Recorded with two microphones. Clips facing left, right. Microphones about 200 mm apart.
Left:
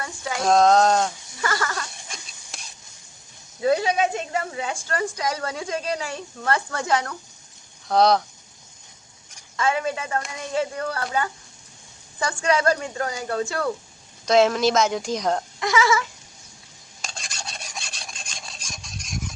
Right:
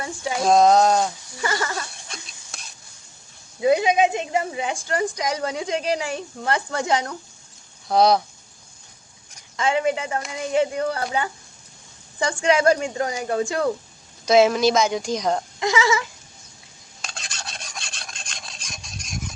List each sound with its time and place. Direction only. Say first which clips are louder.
0.3 s speech: right 1 dB; 5° right (ahead or behind)
1.4 s speech: right 1 dB; 20° right (ahead or behind)
3.6 s speech: right 3 dB; 15° right (ahead or behind)
7.9 s a woman's voice: right 1 dB; 5° right (ahead or behind)
9.6 s speech: right 3 dB; 20° right (ahead or behind)
14.3 s a woman's voice: right 2 dB; 5° right (ahead or behind)
15.6 s speech: even; 20° right (ahead or behind)
17.2 s filing: even; centre (ahead or behind)